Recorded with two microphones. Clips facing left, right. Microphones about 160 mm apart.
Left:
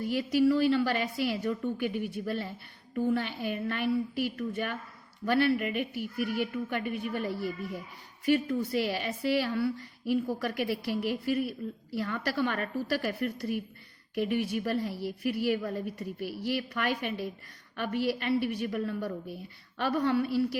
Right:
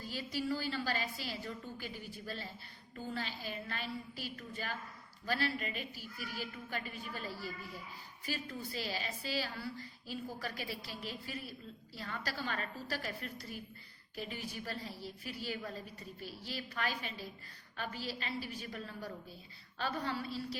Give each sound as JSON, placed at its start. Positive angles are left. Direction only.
{"t": 0.0, "sound": "a woman's voice", "side_deg": 65}